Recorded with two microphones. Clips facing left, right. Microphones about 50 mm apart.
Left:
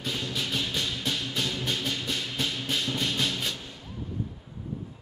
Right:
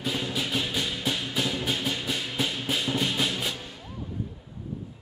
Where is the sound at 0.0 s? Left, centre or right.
Centre.